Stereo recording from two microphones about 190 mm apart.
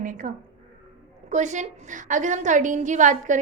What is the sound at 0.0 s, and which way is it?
A woman's voice, 45° right (ahead or behind).